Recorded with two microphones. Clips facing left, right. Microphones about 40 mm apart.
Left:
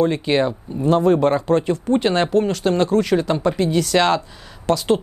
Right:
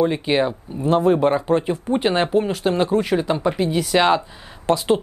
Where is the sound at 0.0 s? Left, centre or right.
Centre.